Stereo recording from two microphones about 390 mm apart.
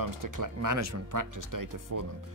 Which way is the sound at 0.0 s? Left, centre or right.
Right.